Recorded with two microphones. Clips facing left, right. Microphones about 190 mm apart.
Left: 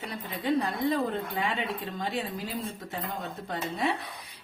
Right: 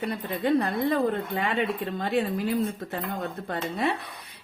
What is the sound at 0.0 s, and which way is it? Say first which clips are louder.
A woman's voice: right 6 dB; 60° right (ahead or behind).